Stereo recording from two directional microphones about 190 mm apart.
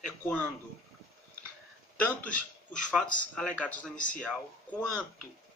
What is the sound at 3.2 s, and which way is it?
Speech, 5° left (ahead or behind).